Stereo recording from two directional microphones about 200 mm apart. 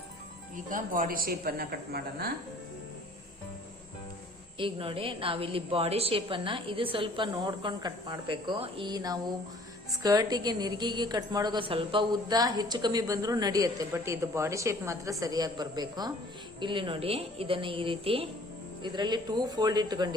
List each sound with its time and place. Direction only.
0.5 s a woman's voice: 40° right (ahead or behind)
4.5 s a woman's voice: 25° right (ahead or behind)